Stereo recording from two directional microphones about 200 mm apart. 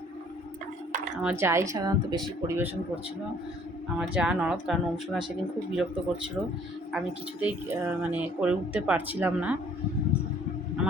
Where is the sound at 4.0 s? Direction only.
5° right (ahead or behind).